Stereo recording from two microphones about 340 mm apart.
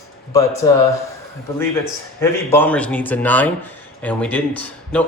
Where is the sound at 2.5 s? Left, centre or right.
Centre.